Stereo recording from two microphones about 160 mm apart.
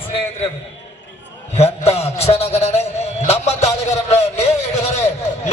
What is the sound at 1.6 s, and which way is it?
A man's voice, 40° left (ahead or behind).